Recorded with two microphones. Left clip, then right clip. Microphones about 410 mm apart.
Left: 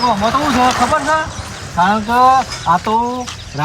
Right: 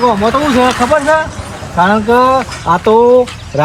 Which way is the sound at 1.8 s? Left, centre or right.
Centre.